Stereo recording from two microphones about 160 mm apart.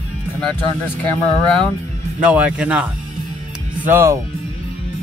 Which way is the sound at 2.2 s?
5° right (ahead or behind).